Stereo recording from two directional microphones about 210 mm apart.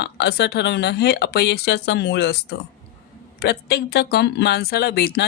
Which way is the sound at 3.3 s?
50° left (ahead or behind).